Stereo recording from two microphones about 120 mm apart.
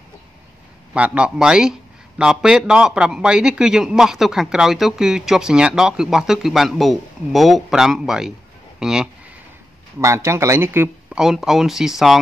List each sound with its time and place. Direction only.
0.9 s speech: 10° right (ahead or behind)
9.9 s speech: 25° right (ahead or behind)
11.1 s speech: 5° right (ahead or behind)